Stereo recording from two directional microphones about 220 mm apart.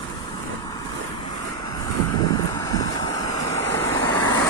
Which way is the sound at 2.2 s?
15° left (ahead or behind).